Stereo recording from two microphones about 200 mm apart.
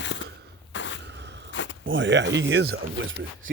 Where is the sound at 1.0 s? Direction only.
60° right (ahead or behind).